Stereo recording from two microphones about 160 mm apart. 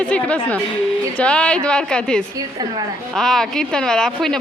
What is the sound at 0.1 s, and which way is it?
A woman's voice, 5° left (ahead or behind).